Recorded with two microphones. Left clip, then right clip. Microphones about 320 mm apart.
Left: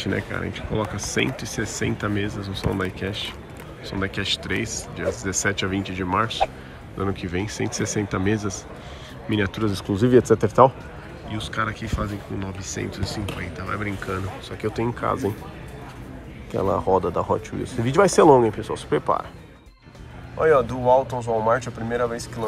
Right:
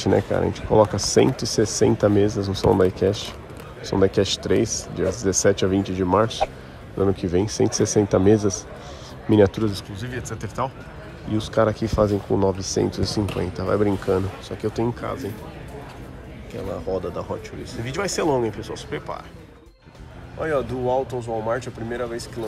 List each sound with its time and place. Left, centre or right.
0.0 s speech: centre
9.7 s speech: centre
11.3 s speech: centre
16.5 s speech: centre
20.3 s speech: centre